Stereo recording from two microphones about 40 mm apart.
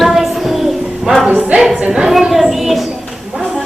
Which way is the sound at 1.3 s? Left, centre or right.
Right.